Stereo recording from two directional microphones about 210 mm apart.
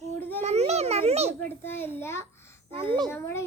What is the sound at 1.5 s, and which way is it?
A child's voice, 10° left (ahead or behind).